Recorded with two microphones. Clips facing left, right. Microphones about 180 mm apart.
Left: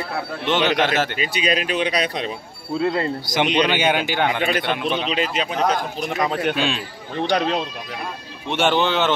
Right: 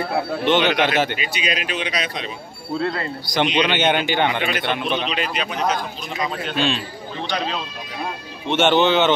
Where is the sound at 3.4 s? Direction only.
10° left (ahead or behind).